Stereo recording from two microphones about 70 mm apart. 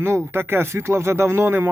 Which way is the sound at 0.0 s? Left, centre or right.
Right.